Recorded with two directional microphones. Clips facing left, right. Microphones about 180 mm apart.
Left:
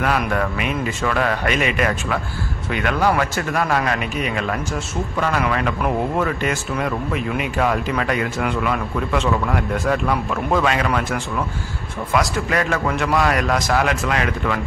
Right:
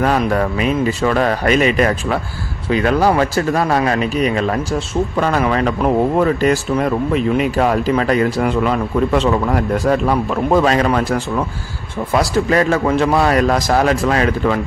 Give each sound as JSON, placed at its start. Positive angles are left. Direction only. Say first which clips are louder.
{"t": 0.2, "sound": "speech", "louder": "right 5 dB", "side_deg": -35}